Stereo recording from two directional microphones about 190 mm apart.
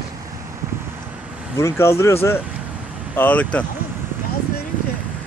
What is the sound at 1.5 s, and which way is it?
Speech, 15° left (ahead or behind).